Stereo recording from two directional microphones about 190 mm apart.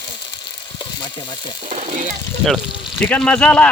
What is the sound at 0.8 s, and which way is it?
Speech, 25° left (ahead or behind).